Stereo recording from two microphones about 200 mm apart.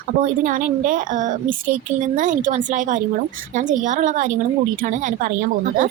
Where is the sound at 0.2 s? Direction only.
40° right (ahead or behind).